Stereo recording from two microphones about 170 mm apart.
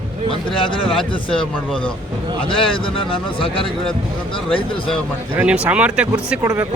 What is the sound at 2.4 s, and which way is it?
Speech, 30° left (ahead or behind).